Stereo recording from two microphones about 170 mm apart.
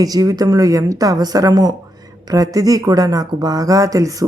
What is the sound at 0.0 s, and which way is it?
Speech, 20° right (ahead or behind).